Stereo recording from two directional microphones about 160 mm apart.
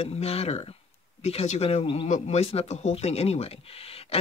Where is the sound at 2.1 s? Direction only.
45° left (ahead or behind).